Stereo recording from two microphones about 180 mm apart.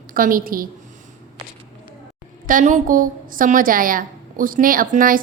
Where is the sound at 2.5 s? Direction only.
45° right (ahead or behind).